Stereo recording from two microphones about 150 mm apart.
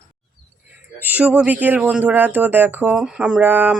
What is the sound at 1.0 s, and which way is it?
Speech, 10° right (ahead or behind).